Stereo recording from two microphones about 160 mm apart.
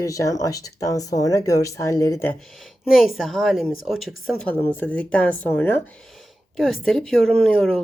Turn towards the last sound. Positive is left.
turn(degrees=5)  # may be behind; listen again after turning